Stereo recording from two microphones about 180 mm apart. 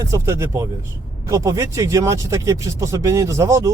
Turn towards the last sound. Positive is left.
turn(degrees=-15)  # may be behind; listen again after turning